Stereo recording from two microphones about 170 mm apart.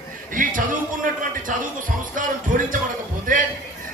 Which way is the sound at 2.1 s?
50° right (ahead or behind).